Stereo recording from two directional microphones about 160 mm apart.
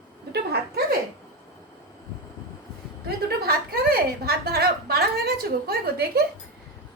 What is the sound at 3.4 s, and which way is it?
A woman's voice, 70° right (ahead or behind).